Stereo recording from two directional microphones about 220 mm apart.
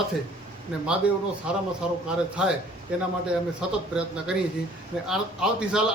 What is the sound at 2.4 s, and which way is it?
Speech, 5° right (ahead or behind).